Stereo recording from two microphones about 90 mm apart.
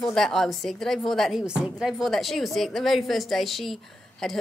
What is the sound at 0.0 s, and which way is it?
Speech, 5° left (ahead or behind).